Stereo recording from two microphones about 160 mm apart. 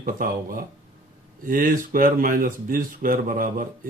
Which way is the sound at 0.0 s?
60° right (ahead or behind).